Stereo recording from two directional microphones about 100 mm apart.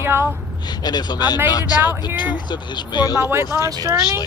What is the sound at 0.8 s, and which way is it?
Speech, 45° left (ahead or behind).